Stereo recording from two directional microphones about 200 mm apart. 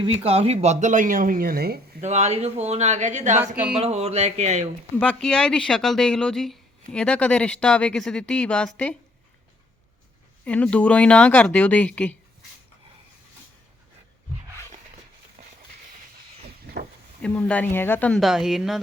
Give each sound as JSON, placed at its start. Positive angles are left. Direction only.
{"t": 0.0, "sound": "speech", "side_deg": -30}
{"t": 2.0, "sound": "speech", "side_deg": -35}
{"t": 3.3, "sound": "speech", "side_deg": -10}
{"t": 3.8, "sound": "speech", "side_deg": -30}
{"t": 4.9, "sound": "speech", "side_deg": 5}
{"t": 10.4, "sound": "speech", "side_deg": 5}
{"t": 17.2, "sound": "speech", "side_deg": 10}